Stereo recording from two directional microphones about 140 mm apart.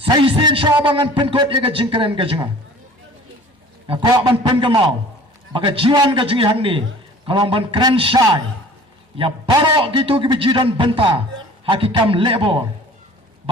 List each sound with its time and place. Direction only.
0.1 s a man's voice: 35° right (ahead or behind)
3.8 s a man's voice: 35° right (ahead or behind)